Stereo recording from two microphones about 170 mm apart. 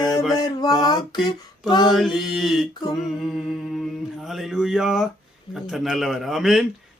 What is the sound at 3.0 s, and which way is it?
Speech, centre (ahead or behind).